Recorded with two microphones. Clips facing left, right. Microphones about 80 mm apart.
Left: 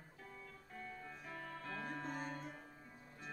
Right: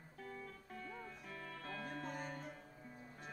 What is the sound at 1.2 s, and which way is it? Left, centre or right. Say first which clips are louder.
Music: left 3 dB; left.